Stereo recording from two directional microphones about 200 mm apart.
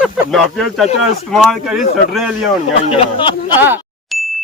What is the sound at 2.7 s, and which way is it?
Speech, 30° left (ahead or behind).